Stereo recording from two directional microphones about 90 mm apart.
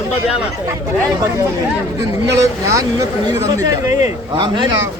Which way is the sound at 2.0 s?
35° right (ahead or behind).